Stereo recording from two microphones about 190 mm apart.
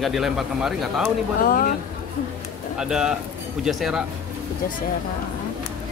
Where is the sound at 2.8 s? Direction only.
5° right (ahead or behind).